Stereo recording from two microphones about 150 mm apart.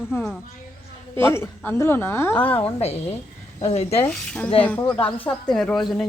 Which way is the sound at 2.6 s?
45° left (ahead or behind).